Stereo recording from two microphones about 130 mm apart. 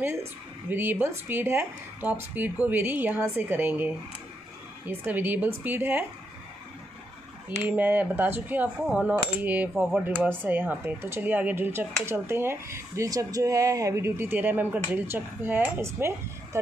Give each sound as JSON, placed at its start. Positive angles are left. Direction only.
{"t": 0.7, "sound": "coin", "side_deg": -15}
{"t": 7.6, "sound": "coin", "side_deg": -15}
{"t": 15.8, "sound": "speech", "side_deg": -20}